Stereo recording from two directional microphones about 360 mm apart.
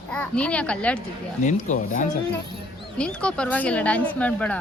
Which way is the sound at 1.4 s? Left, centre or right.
Left.